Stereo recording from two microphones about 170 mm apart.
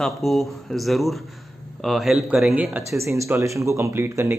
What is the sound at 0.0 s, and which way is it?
Speech, centre (ahead or behind).